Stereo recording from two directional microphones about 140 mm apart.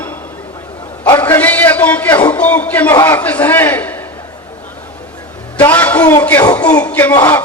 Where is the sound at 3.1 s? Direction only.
10° left (ahead or behind).